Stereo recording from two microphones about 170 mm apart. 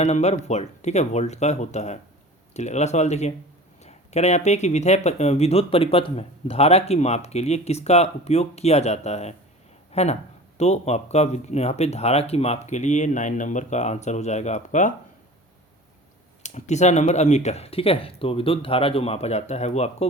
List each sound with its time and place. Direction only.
0.0 s speech: 40° left (ahead or behind)
16.4 s speech: 45° left (ahead or behind)